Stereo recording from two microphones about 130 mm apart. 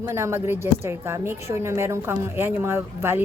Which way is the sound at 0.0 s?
20° right (ahead or behind).